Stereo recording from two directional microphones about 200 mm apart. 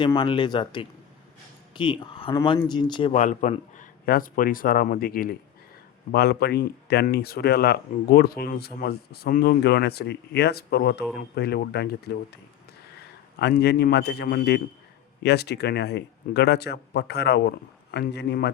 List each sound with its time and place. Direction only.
0.0 s speech: 25° left (ahead or behind)
3.1 s speech: 40° left (ahead or behind); by 12.1 s 55° left (ahead or behind)
13.4 s speech: 55° left (ahead or behind)